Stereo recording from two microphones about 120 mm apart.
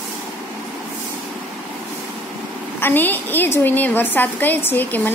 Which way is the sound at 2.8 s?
15° left (ahead or behind).